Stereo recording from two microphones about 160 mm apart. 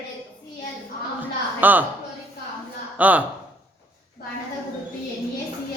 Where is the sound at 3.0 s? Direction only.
10° right (ahead or behind).